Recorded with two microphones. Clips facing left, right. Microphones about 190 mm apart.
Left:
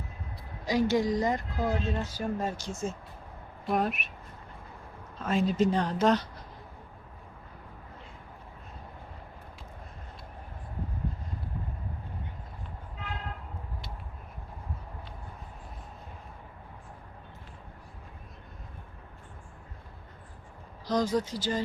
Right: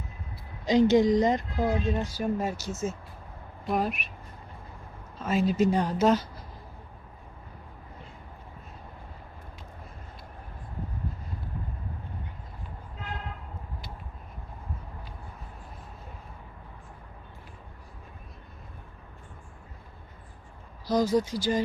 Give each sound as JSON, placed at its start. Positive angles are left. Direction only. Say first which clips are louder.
{"t": 0.6, "sound": "a woman's voice", "louder": "right 6 dB", "side_deg": -20}
{"t": 5.2, "sound": "a woman's voice", "louder": "right 2 dB", "side_deg": -5}
{"t": 20.8, "sound": "speech", "louder": "right 3 dB", "side_deg": -10}